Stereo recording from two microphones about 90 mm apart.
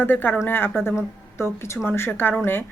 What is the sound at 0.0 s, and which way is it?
A woman's voice, 20° left (ahead or behind).